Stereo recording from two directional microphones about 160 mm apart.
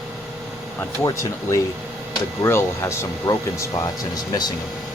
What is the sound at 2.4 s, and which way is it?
Speech, 15° left (ahead or behind).